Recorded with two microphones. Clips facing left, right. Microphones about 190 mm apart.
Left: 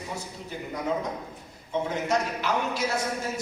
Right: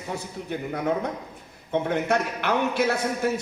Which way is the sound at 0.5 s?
60° right (ahead or behind).